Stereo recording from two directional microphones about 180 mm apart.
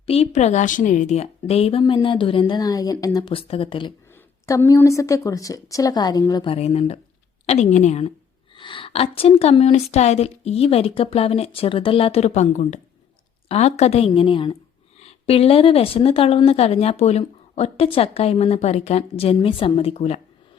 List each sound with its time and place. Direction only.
0.0 s a woman's voice: 35° left (ahead or behind)
4.4 s a woman's voice: 15° left (ahead or behind); by 8.1 s 40° left (ahead or behind)
8.5 s speech: 30° left (ahead or behind)